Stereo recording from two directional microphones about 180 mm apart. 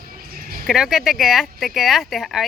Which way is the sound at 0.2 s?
55° right (ahead or behind).